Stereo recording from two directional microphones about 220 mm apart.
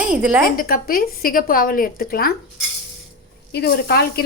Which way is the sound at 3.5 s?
45° left (ahead or behind).